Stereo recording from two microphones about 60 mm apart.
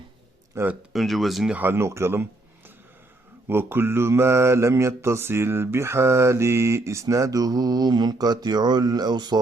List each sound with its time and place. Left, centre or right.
0.6 s mantra: right
0.9 s speech: centre
1.5 s speech: right
1.8 s mantra: right
3.4 s mantra: right
8.2 s speech: right